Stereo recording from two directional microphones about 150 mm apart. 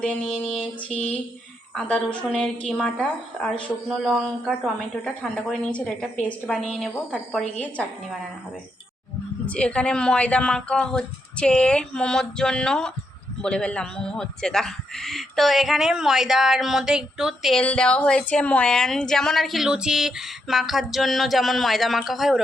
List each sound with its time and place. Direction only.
0.3 s a man's voice: centre (ahead or behind)
9.5 s a man's voice: 5° left (ahead or behind)